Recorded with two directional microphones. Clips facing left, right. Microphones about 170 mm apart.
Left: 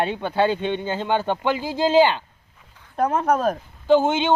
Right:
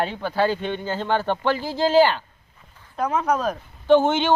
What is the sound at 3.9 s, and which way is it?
Speech, 15° left (ahead or behind).